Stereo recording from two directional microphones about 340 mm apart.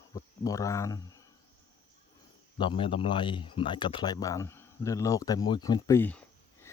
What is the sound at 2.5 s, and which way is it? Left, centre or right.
Speech, centre.